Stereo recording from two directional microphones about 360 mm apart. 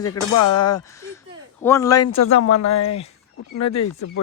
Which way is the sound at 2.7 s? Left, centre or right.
Centre.